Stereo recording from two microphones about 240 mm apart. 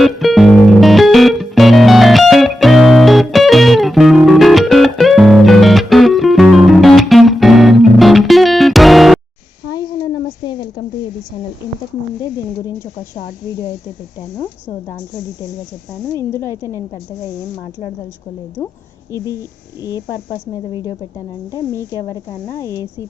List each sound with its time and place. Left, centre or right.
0.0 s music: centre
12.2 s a sound: centre
16.3 s speech: centre
19.4 s speech: centre